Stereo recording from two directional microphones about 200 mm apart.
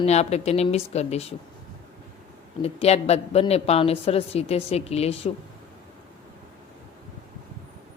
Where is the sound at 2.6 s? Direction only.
30° left (ahead or behind).